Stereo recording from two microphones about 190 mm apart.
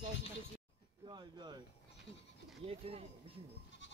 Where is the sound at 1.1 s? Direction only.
25° right (ahead or behind).